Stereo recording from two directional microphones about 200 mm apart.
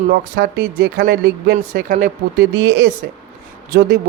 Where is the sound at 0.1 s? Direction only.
50° right (ahead or behind).